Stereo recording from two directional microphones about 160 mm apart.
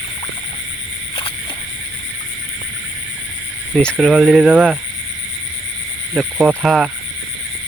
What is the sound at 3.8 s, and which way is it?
Speech, 5° left (ahead or behind).